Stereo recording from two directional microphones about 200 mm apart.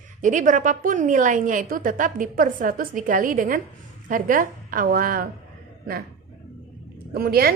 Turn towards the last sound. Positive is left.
turn(degrees=-50)  # may be behind; listen again after turning